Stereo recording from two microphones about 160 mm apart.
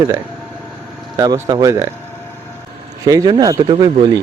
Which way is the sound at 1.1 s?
25° right (ahead or behind).